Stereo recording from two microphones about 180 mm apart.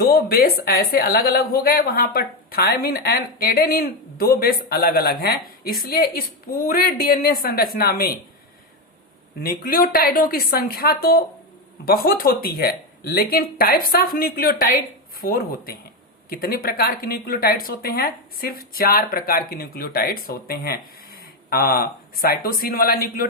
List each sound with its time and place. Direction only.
0.0 s a woman's voice: 55° left (ahead or behind)
9.4 s a woman's voice: 55° left (ahead or behind)